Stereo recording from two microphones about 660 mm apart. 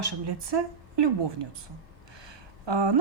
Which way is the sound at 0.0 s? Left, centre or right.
Right.